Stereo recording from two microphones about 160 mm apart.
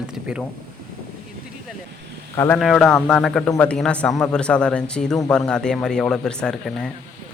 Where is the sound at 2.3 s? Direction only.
20° left (ahead or behind).